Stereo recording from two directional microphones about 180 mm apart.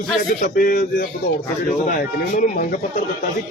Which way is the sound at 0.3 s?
55° left (ahead or behind).